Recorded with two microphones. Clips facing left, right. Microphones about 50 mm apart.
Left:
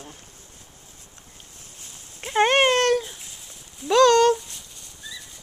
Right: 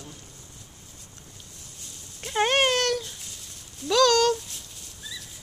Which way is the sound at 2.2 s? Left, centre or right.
Centre.